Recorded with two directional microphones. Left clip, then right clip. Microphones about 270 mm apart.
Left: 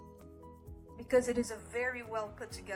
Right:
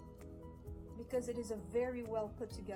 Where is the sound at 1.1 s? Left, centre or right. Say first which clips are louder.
Left 9 dB; centre.